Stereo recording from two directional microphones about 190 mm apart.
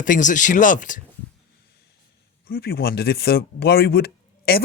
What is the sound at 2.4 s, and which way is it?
Speech, 50° left (ahead or behind).